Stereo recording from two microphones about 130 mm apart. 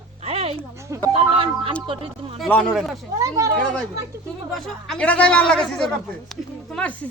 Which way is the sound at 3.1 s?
25° right (ahead or behind).